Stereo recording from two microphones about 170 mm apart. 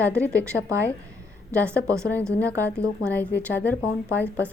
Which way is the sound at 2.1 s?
10° left (ahead or behind).